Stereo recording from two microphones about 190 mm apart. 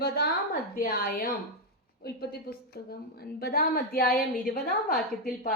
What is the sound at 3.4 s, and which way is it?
A woman's voice, 55° left (ahead or behind).